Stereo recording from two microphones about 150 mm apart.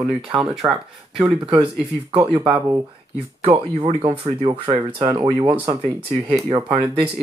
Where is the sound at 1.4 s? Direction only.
40° right (ahead or behind).